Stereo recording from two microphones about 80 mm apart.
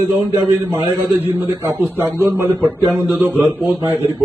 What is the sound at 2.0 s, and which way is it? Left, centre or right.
A man's voice, right.